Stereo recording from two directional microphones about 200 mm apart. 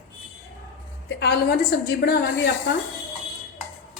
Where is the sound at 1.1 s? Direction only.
55° left (ahead or behind).